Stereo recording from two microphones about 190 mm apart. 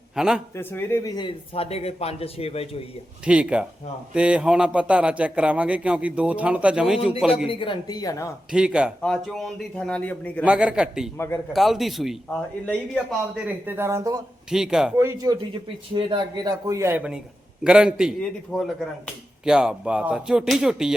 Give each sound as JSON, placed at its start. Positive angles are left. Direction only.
{"t": 0.2, "sound": "speech", "side_deg": 0}
{"t": 0.5, "sound": "speech", "side_deg": 10}
{"t": 3.2, "sound": "a man's voice", "side_deg": -5}
{"t": 7.4, "sound": "speech", "side_deg": 25}
{"t": 8.5, "sound": "speech", "side_deg": -5}
{"t": 10.4, "sound": "speech", "side_deg": -5}
{"t": 13.3, "sound": "a man's voice", "side_deg": -10}
{"t": 14.5, "sound": "speech", "side_deg": -5}
{"t": 14.9, "sound": "a man's voice", "side_deg": -20}